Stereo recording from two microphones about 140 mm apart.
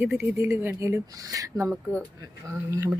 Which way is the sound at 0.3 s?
20° right (ahead or behind).